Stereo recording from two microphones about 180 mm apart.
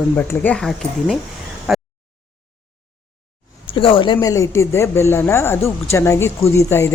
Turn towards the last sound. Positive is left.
turn(degrees=15)  # may be behind; listen again after turning